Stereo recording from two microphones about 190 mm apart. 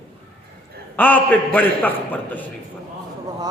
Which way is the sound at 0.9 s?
10° left (ahead or behind).